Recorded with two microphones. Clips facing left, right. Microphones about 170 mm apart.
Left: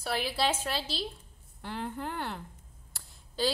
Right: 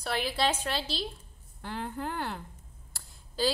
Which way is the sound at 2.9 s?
Centre (ahead or behind).